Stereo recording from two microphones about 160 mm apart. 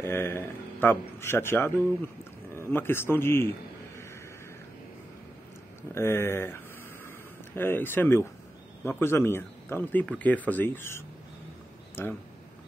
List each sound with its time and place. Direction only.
0.0 s speech: 15° left (ahead or behind)
5.9 s speech: 15° left (ahead or behind)